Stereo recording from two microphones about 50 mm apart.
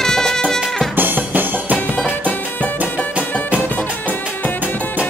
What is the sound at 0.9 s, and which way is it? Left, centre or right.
Drum, right.